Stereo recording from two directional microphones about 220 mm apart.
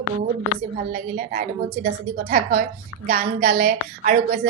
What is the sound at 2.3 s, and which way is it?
A woman's voice, 45° right (ahead or behind).